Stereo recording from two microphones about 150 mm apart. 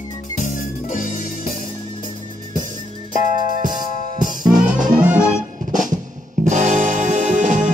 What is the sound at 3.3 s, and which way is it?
Music, 60° right (ahead or behind).